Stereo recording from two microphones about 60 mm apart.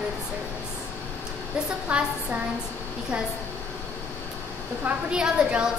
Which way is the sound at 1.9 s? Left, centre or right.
Right.